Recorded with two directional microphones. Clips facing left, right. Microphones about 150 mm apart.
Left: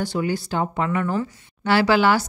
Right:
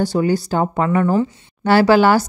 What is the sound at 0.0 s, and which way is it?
Speech, 35° right (ahead or behind).